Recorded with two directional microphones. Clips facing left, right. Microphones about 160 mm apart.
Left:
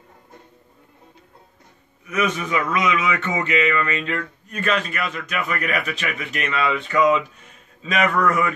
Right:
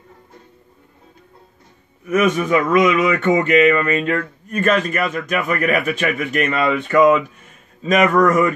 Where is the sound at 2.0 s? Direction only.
50° right (ahead or behind).